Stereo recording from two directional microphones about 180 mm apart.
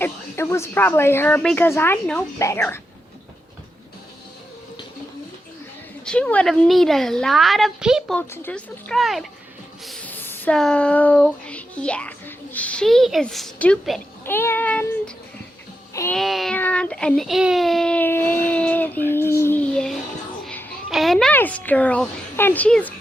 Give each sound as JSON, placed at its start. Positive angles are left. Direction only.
{"t": 0.0, "sound": "child singing", "side_deg": 15}
{"t": 6.1, "sound": "a woman's voice", "side_deg": 5}
{"t": 8.3, "sound": "a woman's voice", "side_deg": 10}
{"t": 14.3, "sound": "child singing", "side_deg": 10}
{"t": 16.1, "sound": "a woman's voice", "side_deg": 0}
{"t": 16.6, "sound": "child singing", "side_deg": 10}
{"t": 20.4, "sound": "a woman's voice", "side_deg": 5}